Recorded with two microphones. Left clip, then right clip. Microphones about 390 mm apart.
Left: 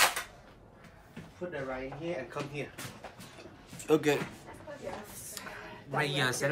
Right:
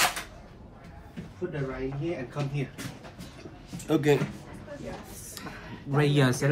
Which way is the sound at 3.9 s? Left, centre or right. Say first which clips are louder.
Right 3 dB; centre.